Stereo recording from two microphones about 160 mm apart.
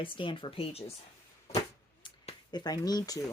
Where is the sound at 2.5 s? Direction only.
25° left (ahead or behind).